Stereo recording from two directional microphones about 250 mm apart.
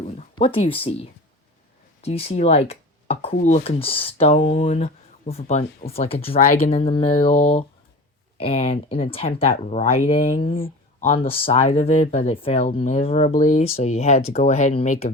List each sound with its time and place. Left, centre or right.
0.0 s speech: left